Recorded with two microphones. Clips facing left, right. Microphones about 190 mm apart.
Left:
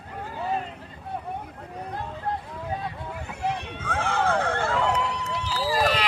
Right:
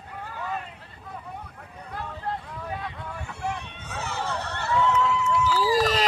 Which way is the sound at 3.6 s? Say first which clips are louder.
Left 6 dB; 90° left.